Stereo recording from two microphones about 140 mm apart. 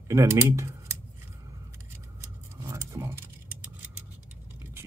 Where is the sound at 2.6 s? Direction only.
20° right (ahead or behind).